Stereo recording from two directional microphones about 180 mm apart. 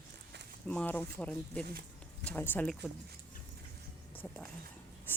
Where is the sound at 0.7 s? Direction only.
10° left (ahead or behind).